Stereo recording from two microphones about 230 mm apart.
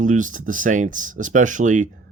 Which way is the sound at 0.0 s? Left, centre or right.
Right.